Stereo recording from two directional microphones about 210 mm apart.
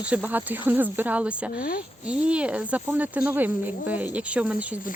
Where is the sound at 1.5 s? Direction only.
45° left (ahead or behind).